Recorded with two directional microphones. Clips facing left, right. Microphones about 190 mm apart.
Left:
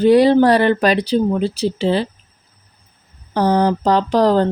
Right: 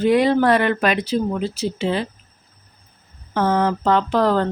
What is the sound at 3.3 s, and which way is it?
Speech, 35° left (ahead or behind).